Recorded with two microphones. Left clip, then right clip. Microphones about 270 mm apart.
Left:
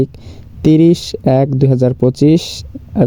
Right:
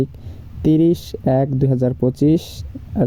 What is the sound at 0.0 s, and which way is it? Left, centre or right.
Speech, left.